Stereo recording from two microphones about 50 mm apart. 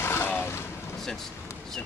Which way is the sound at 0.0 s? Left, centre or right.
Left.